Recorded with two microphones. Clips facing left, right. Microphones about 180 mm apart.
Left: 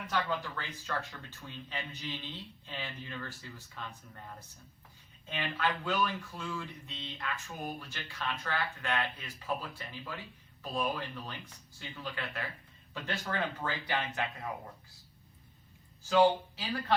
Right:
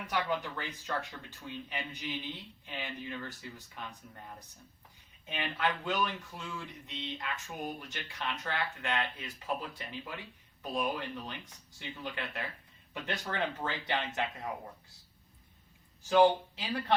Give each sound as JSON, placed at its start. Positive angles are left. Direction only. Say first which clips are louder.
{"t": 0.1, "sound": "speech", "louder": "right 1 dB", "side_deg": -15}
{"t": 16.0, "sound": "speech", "louder": "right 1 dB", "side_deg": -20}